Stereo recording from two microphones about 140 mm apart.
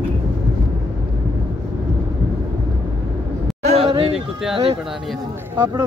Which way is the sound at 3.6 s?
55° right (ahead or behind).